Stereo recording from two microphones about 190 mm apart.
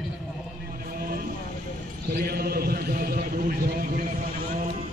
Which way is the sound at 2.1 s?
55° right (ahead or behind).